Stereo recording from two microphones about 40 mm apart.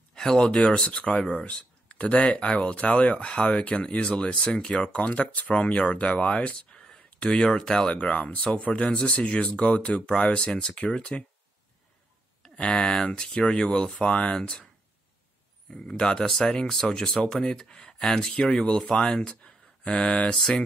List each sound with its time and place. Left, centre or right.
0.4 s speech: left
1.3 s speech: left
4.8 s speech: left
6.7 s a sound: centre
7.2 s speech: centre
7.9 s speech: left
12.5 s speech: left
15.7 s speech: centre